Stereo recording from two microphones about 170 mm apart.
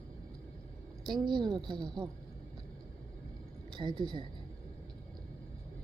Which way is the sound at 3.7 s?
30° right (ahead or behind).